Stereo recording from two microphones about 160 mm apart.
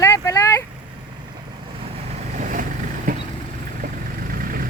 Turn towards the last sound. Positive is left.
turn(degrees=-65)  # may be behind; listen again after turning